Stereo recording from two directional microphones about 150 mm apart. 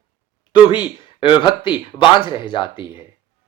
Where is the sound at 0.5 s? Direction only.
30° left (ahead or behind).